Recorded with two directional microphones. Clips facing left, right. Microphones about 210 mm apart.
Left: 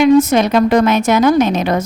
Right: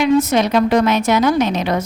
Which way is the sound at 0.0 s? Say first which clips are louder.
Left 4 dB; 50° left (ahead or behind).